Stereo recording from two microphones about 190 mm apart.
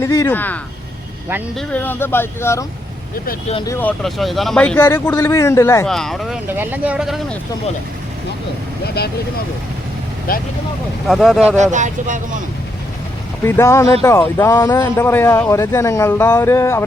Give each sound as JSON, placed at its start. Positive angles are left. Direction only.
{"t": 0.0, "sound": "speech", "side_deg": 15}
{"t": 3.7, "sound": "speech", "side_deg": 10}
{"t": 5.8, "sound": "speech", "side_deg": 0}
{"t": 9.0, "sound": "speech", "side_deg": 55}
{"t": 10.3, "sound": "speech", "side_deg": 50}
{"t": 11.1, "sound": "speech", "side_deg": 0}
{"t": 11.5, "sound": "speech", "side_deg": -40}
{"t": 13.4, "sound": "speech", "side_deg": 15}